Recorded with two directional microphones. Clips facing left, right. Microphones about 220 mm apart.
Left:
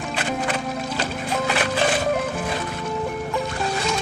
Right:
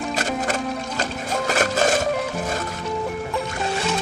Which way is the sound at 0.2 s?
45° right (ahead or behind).